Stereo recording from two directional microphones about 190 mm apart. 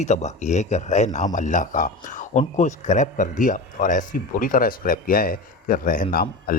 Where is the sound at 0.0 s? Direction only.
35° left (ahead or behind).